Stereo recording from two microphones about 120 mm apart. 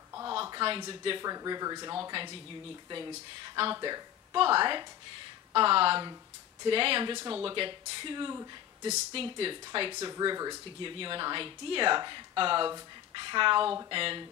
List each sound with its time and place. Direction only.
0.3 s a sound: 45° right (ahead or behind)
1.2 s speech: 30° right (ahead or behind)
8.8 s speech: 60° right (ahead or behind); by 10.6 s 35° right (ahead or behind)
10.8 s speech: 45° right (ahead or behind)